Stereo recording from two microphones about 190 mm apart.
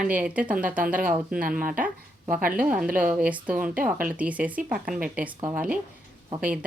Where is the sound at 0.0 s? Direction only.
5° right (ahead or behind).